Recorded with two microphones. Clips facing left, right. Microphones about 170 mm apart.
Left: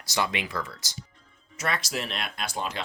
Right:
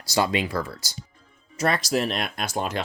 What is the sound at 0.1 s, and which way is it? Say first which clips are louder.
Speech: right 6 dB; 35° right (ahead or behind).